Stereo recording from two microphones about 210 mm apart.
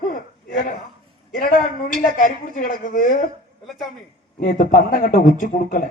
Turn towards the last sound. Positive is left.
turn(degrees=40)  # may be behind; listen again after turning